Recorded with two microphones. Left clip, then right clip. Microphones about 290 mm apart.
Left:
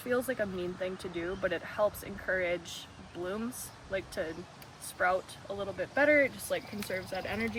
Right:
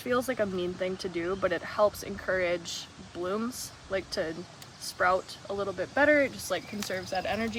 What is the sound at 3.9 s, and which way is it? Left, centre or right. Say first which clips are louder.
Speech: right 4 dB; right.